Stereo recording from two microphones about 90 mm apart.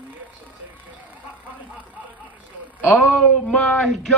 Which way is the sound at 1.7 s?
20° right (ahead or behind).